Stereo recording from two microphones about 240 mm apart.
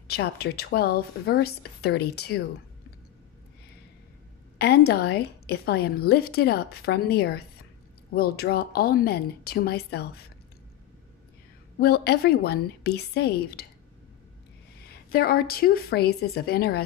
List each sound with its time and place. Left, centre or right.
0.1 s a woman's voice: left
4.6 s a woman's voice: left
11.8 s a woman's voice: left
14.9 s a woman's voice: left